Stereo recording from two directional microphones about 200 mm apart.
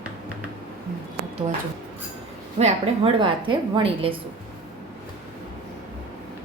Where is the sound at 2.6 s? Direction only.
25° right (ahead or behind).